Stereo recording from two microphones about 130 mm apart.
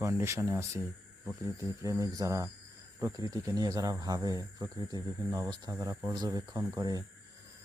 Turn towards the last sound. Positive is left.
turn(degrees=-30)  # may be behind; listen again after turning